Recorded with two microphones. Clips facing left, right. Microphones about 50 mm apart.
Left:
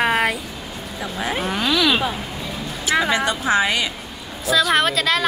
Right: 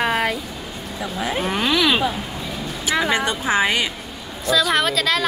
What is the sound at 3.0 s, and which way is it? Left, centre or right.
Speech, centre.